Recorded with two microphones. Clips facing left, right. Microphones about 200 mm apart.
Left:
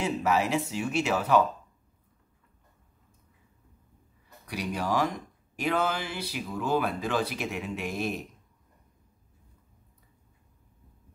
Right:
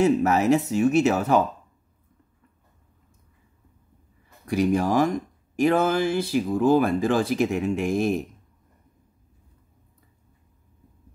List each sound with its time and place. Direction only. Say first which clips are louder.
0.0 s speech: right 7 dB; 45° right (ahead or behind)
4.6 s speech: right 8 dB; 50° right (ahead or behind)